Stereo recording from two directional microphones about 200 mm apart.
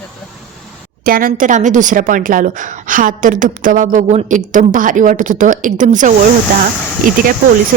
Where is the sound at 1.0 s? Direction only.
45° right (ahead or behind).